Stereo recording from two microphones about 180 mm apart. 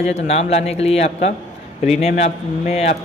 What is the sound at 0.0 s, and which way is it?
A man's voice, 35° left (ahead or behind).